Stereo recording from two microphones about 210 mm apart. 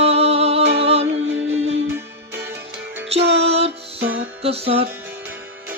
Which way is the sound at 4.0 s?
60° right (ahead or behind).